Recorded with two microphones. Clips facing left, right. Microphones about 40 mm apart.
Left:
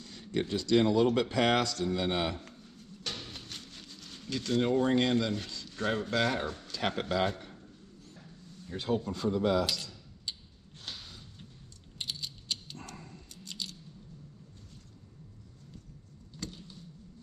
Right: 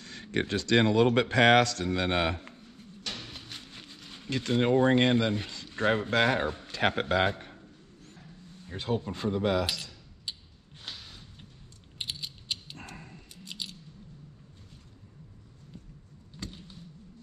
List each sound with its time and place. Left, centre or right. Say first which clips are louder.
0.0 s speech: right 2 dB; right
2.0 s a sound: right 7 dB; right
3.3 s speech: right 1 dB; centre
8.9 s cutlery: even; right
10.8 s a sound: right 1 dB; centre
12.0 s mechanisms: right 1 dB; right
12.7 s dog: right 1 dB; right
16.3 s vehicle: even; right